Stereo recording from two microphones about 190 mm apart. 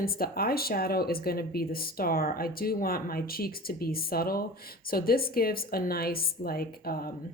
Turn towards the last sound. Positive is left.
turn(degrees=55)  # may be behind; listen again after turning